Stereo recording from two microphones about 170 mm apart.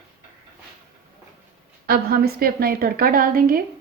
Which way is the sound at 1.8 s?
65° right (ahead or behind).